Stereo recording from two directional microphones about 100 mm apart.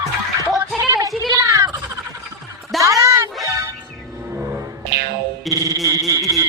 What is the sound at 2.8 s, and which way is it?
Music, 30° right (ahead or behind).